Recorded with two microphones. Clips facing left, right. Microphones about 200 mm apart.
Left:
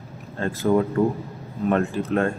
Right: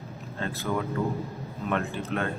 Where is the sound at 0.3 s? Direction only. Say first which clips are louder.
Left 10 dB; 45° left (ahead or behind).